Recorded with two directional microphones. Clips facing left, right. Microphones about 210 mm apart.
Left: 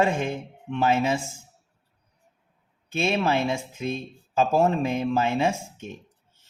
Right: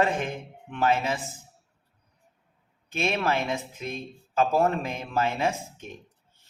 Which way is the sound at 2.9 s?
25° left (ahead or behind).